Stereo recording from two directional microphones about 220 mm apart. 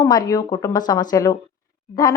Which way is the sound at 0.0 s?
15° left (ahead or behind).